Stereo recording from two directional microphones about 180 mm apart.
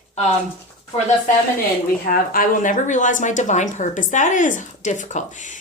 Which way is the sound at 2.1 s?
50° left (ahead or behind).